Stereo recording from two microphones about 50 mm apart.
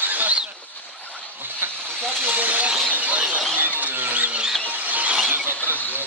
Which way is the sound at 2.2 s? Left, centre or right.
Right.